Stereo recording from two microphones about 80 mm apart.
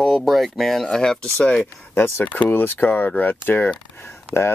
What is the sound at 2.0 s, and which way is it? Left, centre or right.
Speech, left.